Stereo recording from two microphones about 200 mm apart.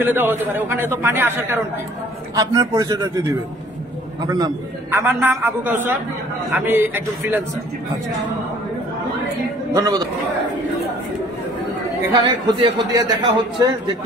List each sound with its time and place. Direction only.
0.0 s a man's voice: 10° right (ahead or behind)
9.8 s a man's voice: 20° right (ahead or behind)
12.1 s a man's voice: 20° right (ahead or behind)